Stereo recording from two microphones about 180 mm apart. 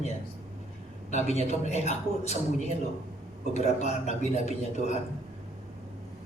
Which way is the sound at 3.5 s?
40° left (ahead or behind).